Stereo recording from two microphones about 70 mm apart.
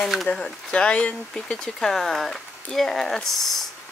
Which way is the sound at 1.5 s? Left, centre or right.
Centre.